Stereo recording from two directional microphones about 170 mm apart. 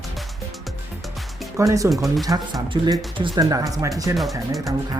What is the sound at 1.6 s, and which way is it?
Speech, 20° right (ahead or behind).